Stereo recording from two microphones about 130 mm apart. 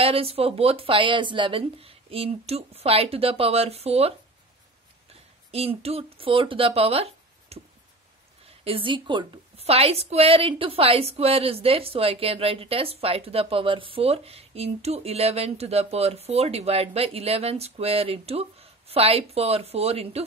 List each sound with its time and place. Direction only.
0.0 s a woman's voice: 45° right (ahead or behind)
5.5 s speech: 50° right (ahead or behind)
8.6 s a woman's voice: 45° right (ahead or behind)